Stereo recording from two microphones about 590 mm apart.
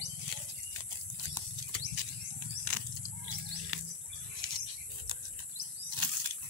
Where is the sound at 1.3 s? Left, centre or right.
Right.